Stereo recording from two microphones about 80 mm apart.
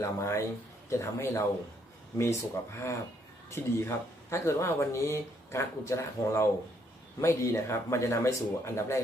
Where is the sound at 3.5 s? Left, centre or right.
Left.